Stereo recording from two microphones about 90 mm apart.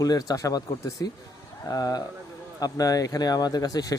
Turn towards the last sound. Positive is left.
turn(degrees=40)  # may be behind; listen again after turning